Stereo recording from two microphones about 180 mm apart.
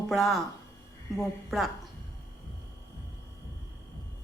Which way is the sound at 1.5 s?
Centre (ahead or behind).